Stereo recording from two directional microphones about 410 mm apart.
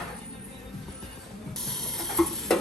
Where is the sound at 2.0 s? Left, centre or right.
Centre.